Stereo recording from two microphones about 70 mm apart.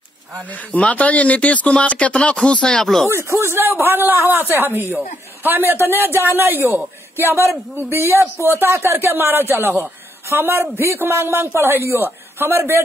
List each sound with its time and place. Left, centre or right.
0.7 s speech: centre
3.3 s speech: right